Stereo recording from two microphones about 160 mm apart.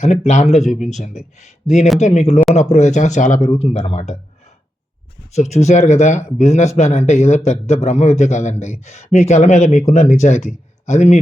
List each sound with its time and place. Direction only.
0.0 s a man's voice: 45° left (ahead or behind)
5.3 s a man's voice: 45° left (ahead or behind)